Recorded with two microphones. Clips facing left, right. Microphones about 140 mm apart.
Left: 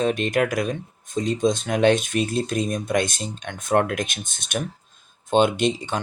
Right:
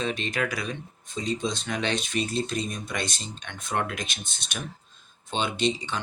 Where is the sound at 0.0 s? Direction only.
50° left (ahead or behind).